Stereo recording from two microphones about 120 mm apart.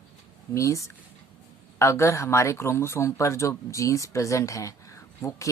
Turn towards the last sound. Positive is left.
turn(degrees=25)  # may be behind; listen again after turning